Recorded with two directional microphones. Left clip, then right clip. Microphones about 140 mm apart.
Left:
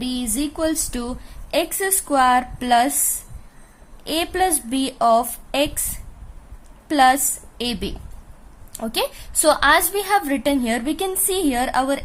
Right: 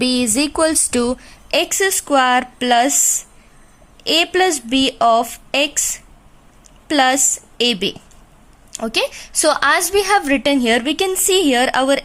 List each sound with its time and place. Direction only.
0.0 s speech: 55° right (ahead or behind)
1.5 s a woman's voice: 25° right (ahead or behind)
4.0 s a woman's voice: 25° right (ahead or behind)
6.8 s a woman's voice: 25° right (ahead or behind)